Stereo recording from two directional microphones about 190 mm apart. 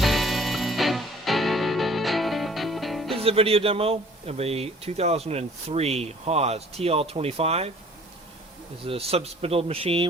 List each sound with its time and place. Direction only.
0.0 s music: centre (ahead or behind)
3.2 s a man's voice: 30° right (ahead or behind)
8.8 s a man's voice: 30° right (ahead or behind)